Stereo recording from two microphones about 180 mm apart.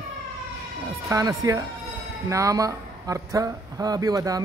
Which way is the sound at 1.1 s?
20° right (ahead or behind).